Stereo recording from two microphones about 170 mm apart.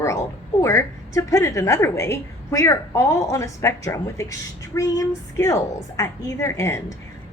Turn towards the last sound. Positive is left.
turn(degrees=15)  # may be behind; listen again after turning